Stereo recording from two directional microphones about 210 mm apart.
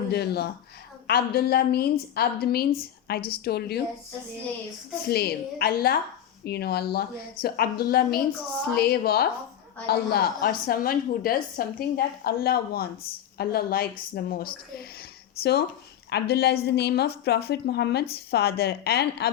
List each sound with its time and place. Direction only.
0.1 s a woman's voice: 50° left (ahead or behind)
5.0 s a woman's voice: 50° left (ahead or behind)